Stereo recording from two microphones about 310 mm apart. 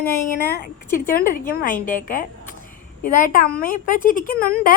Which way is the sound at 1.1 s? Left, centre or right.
Left.